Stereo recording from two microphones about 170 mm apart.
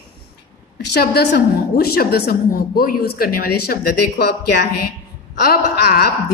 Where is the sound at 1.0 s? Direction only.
70° left (ahead or behind).